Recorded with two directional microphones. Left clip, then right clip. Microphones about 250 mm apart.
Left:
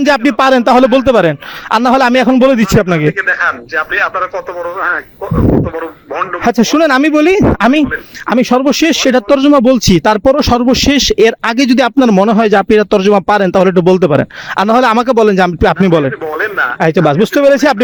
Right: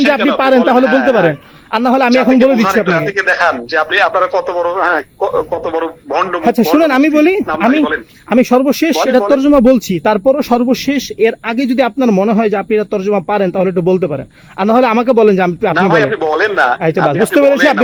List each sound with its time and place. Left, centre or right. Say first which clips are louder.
0.1 s speech: left 5 dB; left
3.2 s speech: right 1 dB; centre
6.4 s speech: left 2 dB; left
16.2 s speech: right 3 dB; centre
16.8 s speech: left 2 dB; left